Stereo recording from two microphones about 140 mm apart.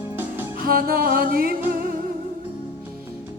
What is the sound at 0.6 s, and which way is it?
Music, 90° right.